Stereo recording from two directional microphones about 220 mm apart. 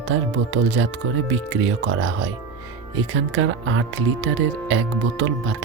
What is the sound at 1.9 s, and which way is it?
Speech, 60° right (ahead or behind).